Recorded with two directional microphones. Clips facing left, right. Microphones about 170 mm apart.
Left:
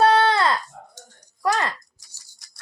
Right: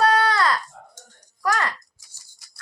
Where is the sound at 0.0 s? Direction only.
25° left (ahead or behind).